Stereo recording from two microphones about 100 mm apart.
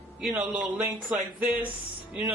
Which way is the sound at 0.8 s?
15° right (ahead or behind).